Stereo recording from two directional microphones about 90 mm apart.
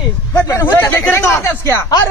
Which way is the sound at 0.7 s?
25° left (ahead or behind).